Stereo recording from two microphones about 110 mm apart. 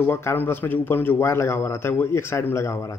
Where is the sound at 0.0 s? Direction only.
20° left (ahead or behind).